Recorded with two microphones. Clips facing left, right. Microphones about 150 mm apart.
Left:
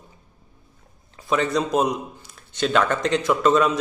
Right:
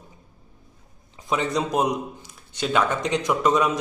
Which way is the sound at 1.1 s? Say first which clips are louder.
Left 2 dB; 15° right (ahead or behind).